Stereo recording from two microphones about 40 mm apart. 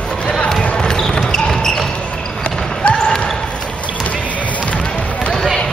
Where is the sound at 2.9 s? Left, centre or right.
Centre.